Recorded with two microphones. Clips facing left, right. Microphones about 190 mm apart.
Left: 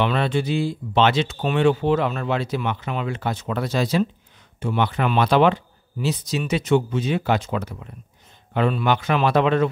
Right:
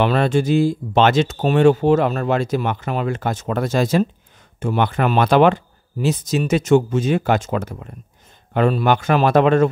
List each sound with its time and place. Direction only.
0.0 s speech: 45° right (ahead or behind)